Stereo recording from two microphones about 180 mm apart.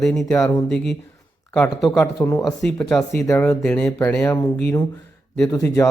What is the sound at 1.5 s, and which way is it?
Speech, 5° left (ahead or behind).